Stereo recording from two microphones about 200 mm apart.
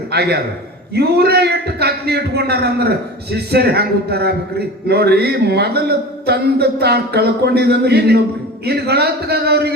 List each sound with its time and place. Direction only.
0.1 s a man's voice: 55° right (ahead or behind)